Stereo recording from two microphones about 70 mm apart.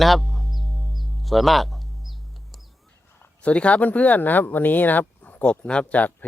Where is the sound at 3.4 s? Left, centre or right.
Centre.